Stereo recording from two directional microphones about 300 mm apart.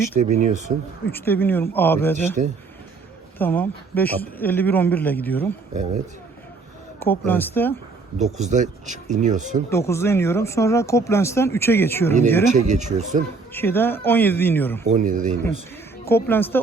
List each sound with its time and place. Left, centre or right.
0.2 s speech: right
1.1 s speech: centre
2.4 s speech: right
3.3 s a man's voice: centre
7.0 s speech: centre
8.2 s speech: right
9.6 s speech: centre
12.5 s speech: right
13.5 s speech: centre
14.8 s speech: right
16.0 s speech: centre